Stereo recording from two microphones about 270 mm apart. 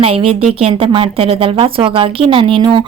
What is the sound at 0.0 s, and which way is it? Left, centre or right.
Speech, right.